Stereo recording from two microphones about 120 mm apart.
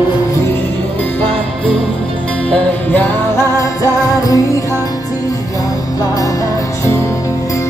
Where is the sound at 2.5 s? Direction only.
15° left (ahead or behind).